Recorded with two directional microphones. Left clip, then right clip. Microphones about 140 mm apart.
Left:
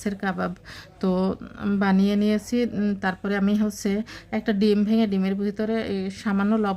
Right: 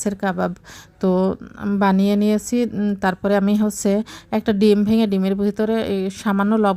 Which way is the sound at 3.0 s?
40° right (ahead or behind).